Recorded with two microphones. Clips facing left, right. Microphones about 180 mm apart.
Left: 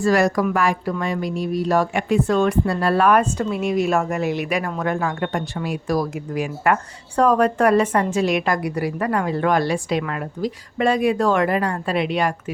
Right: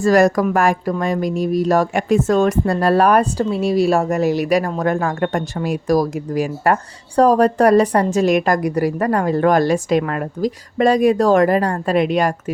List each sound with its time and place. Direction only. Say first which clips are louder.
0.0 s a woman's voice: right 4 dB; 45° right (ahead or behind)